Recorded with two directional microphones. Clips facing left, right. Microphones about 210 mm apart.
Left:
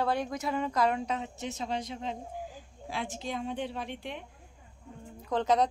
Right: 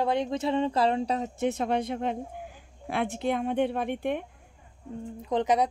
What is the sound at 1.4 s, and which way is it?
Speech, 60° right (ahead or behind).